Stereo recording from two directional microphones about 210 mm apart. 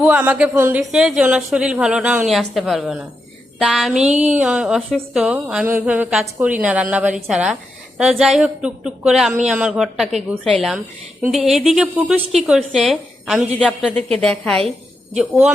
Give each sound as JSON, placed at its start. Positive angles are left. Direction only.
{"t": 0.0, "sound": "a woman's voice", "side_deg": -5}